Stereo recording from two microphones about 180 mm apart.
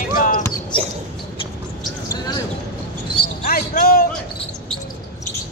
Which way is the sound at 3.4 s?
55° left (ahead or behind).